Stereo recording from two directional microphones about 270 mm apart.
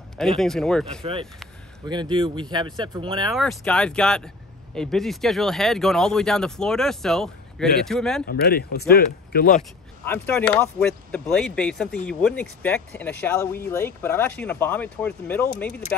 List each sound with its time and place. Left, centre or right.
0.2 s speech: centre
1.9 s speech: centre
3.3 s speech: centre
8.3 s speech: left
9.6 s speech: centre